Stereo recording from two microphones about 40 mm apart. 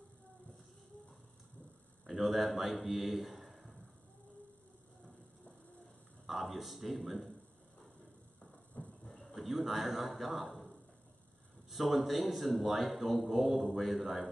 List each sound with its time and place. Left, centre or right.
2.0 s a man's voice: centre
6.2 s a man's voice: centre
8.8 s train: left
9.3 s a man's voice: centre
10.5 s a sound: centre
11.7 s a man's voice: centre